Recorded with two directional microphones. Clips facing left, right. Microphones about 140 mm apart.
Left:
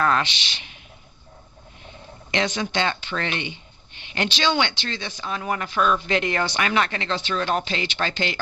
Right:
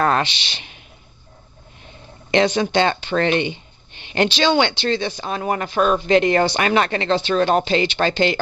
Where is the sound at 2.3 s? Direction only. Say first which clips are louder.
Right 8 dB; 30° right (ahead or behind).